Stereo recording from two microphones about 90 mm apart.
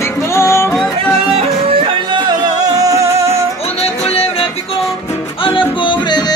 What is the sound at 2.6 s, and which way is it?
Music, 40° right (ahead or behind).